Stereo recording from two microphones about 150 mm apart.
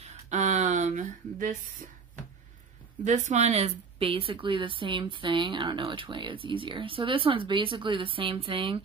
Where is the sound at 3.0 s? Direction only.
50° right (ahead or behind).